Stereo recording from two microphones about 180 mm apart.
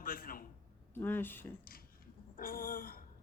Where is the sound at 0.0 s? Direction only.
55° left (ahead or behind).